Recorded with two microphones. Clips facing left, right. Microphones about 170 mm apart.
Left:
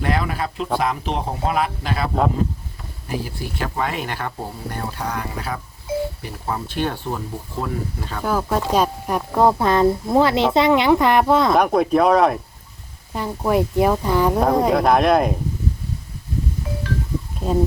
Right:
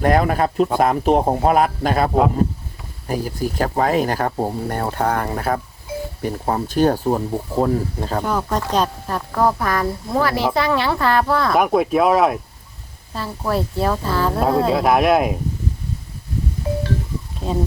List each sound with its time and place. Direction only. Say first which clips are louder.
0.0 s speech: right 6 dB; 45° right (ahead or behind)
3.1 s speech: right 5 dB; 45° right (ahead or behind)
8.2 s speech: left 3 dB; 5° left (ahead or behind); by 11.5 s 20° left (ahead or behind)
11.5 s speech: even; 5° right (ahead or behind)
13.1 s speech: left 3 dB; 15° left (ahead or behind)
14.7 s speech: right 1 dB; 5° right (ahead or behind)
16.7 s a sound: right 6 dB; 30° right (ahead or behind)